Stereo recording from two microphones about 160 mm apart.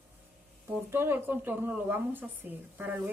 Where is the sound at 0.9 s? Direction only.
15° right (ahead or behind).